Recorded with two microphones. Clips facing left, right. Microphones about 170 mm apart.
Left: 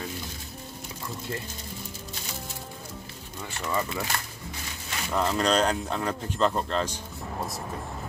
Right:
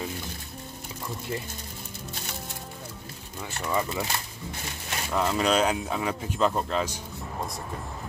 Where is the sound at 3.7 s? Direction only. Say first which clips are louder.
Right 1 dB; 15° right (ahead or behind).